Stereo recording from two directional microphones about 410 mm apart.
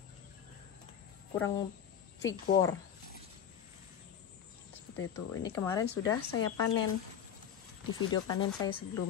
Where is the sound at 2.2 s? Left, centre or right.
Left.